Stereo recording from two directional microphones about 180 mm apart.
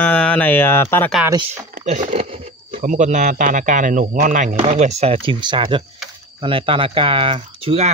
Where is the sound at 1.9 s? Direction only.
40° right (ahead or behind).